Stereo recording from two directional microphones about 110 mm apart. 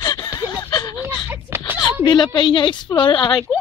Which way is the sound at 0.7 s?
35° left (ahead or behind).